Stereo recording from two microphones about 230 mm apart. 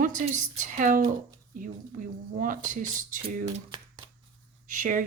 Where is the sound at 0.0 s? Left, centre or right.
Right.